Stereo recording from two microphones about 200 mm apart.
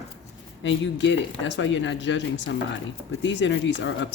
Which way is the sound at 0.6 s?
65° left (ahead or behind).